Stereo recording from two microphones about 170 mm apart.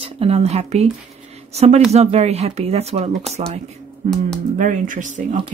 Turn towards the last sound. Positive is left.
turn(degrees=-50)  # may be behind; listen again after turning